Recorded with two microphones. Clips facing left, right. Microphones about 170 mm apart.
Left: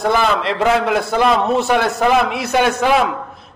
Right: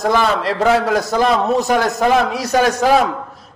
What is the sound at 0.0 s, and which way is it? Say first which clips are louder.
A man's voice: even; 35° right (ahead or behind).